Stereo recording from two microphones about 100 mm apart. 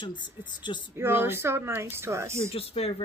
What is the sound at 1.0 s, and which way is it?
Speech, 25° right (ahead or behind).